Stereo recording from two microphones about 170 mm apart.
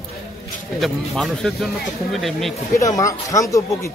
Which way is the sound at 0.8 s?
Centre (ahead or behind).